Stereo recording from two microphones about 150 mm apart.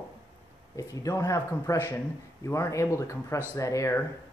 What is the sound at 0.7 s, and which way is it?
Speech, 20° left (ahead or behind).